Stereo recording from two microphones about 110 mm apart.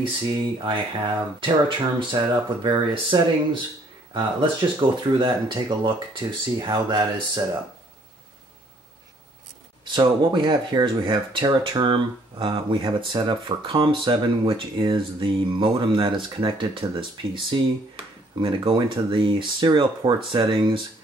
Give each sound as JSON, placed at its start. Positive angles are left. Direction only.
{"t": 0.3, "sound": "speech", "side_deg": -50}
{"t": 9.8, "sound": "speech", "side_deg": -45}